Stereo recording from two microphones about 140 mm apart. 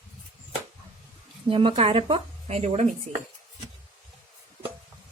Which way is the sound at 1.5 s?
40° right (ahead or behind).